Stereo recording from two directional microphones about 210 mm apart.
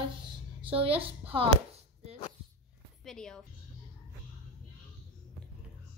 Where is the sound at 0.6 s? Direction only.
25° right (ahead or behind).